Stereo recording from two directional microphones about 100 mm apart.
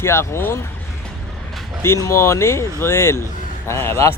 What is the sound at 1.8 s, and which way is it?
Speech, 30° left (ahead or behind).